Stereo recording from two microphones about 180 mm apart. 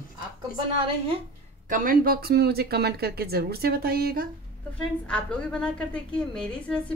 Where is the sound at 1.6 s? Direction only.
50° right (ahead or behind).